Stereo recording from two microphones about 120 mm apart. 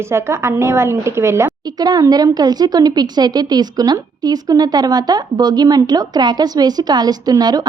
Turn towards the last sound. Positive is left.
turn(degrees=-35)  # may be behind; listen again after turning